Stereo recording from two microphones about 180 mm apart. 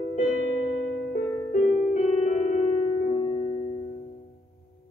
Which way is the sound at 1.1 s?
45° left (ahead or behind).